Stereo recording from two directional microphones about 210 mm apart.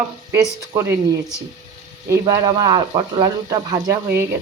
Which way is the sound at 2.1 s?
20° right (ahead or behind).